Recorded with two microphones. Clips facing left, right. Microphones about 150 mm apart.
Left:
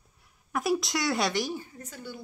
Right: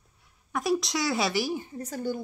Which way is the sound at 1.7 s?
40° right (ahead or behind).